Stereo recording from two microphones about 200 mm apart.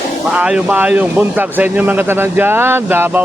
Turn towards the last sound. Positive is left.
turn(degrees=-10)  # may be behind; listen again after turning